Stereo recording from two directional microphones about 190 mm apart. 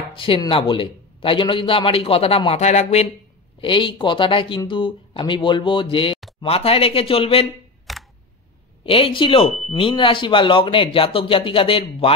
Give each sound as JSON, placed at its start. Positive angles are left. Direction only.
{"t": 0.1, "sound": "a man's voice", "side_deg": 30}
{"t": 3.6, "sound": "a man's voice", "side_deg": 25}
{"t": 7.9, "sound": "camera", "side_deg": 0}
{"t": 8.8, "sound": "a man's voice", "side_deg": 30}